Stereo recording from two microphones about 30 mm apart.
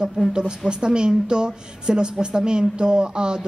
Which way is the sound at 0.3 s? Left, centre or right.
Right.